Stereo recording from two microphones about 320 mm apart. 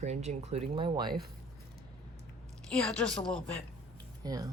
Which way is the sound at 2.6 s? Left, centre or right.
Centre.